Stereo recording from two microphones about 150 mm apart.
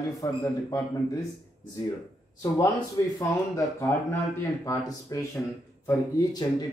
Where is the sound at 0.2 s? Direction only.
25° left (ahead or behind).